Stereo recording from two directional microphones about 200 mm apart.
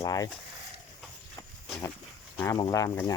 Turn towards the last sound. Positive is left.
turn(degrees=15)  # may be behind; listen again after turning